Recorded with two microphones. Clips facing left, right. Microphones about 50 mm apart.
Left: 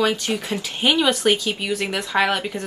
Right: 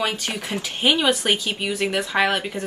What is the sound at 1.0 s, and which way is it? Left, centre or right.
A woman's voice, centre.